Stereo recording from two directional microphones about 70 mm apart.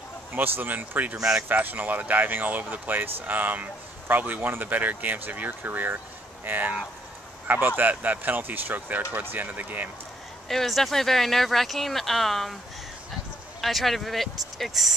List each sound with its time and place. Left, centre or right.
0.3 s speech: right
10.5 s speech: centre
13.6 s speech: centre